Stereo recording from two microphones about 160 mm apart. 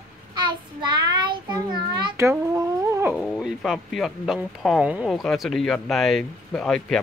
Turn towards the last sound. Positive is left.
turn(degrees=5)  # may be behind; listen again after turning